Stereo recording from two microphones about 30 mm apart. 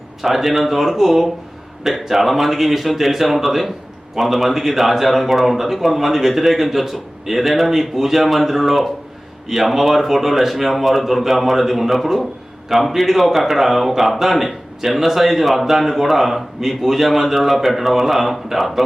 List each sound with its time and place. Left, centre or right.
0.2 s speech: centre